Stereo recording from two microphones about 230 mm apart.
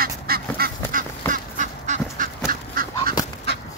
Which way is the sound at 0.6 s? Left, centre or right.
Right.